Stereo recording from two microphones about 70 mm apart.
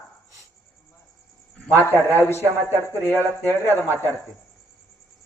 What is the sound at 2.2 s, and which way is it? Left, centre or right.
Speech, left.